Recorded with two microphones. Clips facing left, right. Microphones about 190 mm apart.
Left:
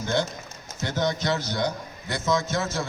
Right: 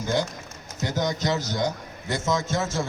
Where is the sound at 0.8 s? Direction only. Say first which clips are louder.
Even; 15° right (ahead or behind).